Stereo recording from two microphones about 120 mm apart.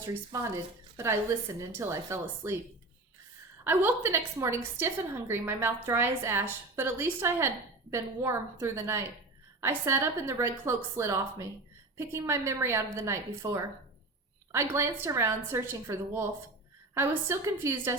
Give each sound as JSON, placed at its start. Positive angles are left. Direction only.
{"t": 0.0, "sound": "a woman's voice", "side_deg": -20}
{"t": 3.6, "sound": "a woman's voice", "side_deg": -15}